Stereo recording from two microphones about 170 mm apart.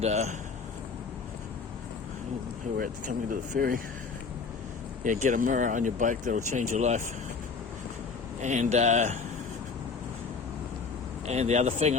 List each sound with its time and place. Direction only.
0.0 s speech: 40° right (ahead or behind)
2.7 s speech: 55° right (ahead or behind)
5.0 s speech: 45° right (ahead or behind)
8.4 s speech: 45° right (ahead or behind)
11.3 s speech: 40° right (ahead or behind)